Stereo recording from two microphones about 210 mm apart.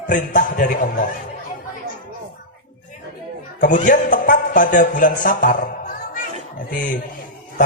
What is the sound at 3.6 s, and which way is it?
A man's voice, 40° left (ahead or behind).